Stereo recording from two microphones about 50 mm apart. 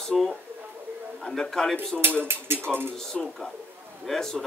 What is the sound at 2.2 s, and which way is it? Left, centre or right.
Speech, right.